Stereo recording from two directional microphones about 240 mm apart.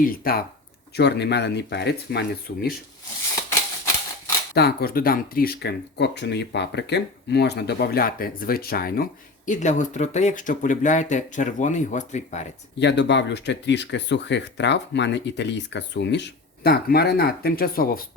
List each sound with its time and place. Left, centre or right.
0.0 s speech: left
4.5 s speech: left
12.8 s speech: left